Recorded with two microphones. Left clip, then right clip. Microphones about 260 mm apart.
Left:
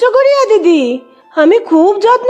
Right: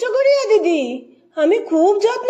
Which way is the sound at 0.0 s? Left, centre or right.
Left.